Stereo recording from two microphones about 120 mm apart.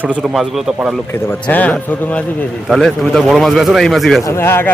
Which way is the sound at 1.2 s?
15° left (ahead or behind).